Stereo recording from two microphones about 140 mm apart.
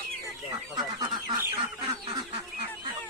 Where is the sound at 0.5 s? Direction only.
30° right (ahead or behind).